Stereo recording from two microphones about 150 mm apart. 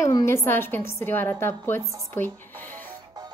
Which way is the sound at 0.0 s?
20° left (ahead or behind).